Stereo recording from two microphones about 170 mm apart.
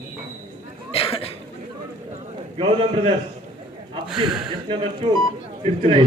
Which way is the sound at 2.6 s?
35° right (ahead or behind).